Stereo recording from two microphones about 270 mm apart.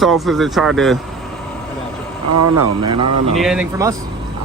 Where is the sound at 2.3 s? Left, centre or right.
Right.